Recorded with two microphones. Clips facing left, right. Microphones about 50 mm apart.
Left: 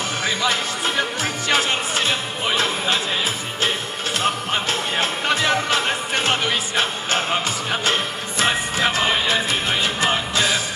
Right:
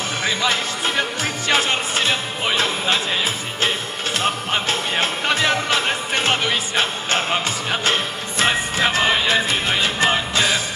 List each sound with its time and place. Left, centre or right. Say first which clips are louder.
0.2 s music: right 1 dB; right
4.5 s music: right 1 dB; right